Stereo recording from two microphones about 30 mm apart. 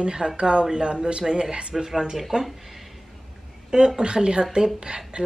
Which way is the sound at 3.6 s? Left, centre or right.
Right.